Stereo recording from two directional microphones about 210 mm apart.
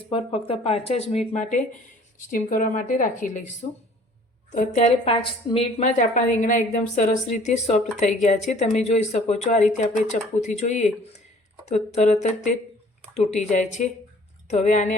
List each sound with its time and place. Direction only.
0.1 s a woman's voice: 25° left (ahead or behind)